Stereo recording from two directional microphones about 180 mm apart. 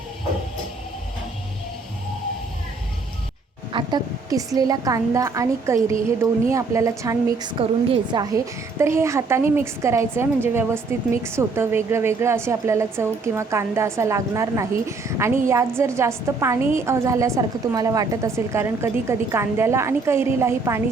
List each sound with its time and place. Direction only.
3.7 s a woman's voice: 25° right (ahead or behind)
7.6 s a woman's voice: 25° right (ahead or behind)